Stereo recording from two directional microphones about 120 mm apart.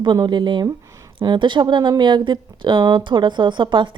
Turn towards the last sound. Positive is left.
turn(degrees=-40)  # may be behind; listen again after turning